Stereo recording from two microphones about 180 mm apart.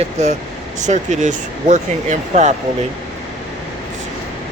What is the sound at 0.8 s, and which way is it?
Speech, 40° right (ahead or behind).